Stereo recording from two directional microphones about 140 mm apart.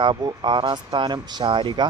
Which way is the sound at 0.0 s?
35° right (ahead or behind).